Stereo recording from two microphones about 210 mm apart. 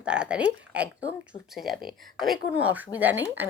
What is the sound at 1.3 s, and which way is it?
Speech, 25° left (ahead or behind).